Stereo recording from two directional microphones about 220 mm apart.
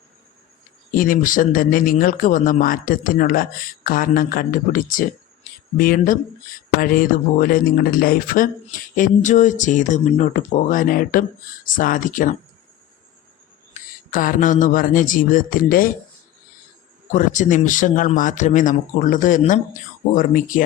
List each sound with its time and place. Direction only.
0.9 s speech: 40° left (ahead or behind)
14.1 s speech: 40° left (ahead or behind)
17.1 s speech: 35° left (ahead or behind)